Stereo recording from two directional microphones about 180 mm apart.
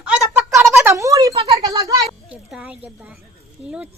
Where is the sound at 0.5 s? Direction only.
15° right (ahead or behind).